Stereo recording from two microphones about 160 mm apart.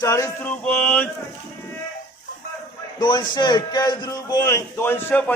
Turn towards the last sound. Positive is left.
turn(degrees=10)  # may be behind; listen again after turning